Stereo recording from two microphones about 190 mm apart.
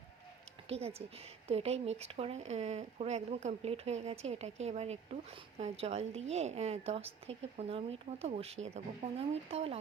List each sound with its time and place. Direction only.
0.7 s speech: 30° right (ahead or behind)